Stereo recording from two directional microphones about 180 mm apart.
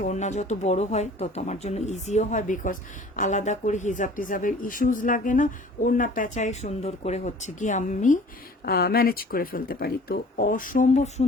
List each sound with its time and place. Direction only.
0.0 s speech: 40° left (ahead or behind)
8.6 s speech: 60° left (ahead or behind); by 11.3 s 40° left (ahead or behind)